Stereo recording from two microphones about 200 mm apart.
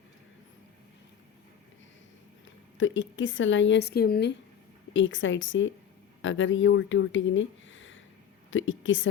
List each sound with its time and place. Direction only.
2.7 s speech: 70° left (ahead or behind); by 4.4 s 55° left (ahead or behind)
4.9 s speech: 70° left (ahead or behind)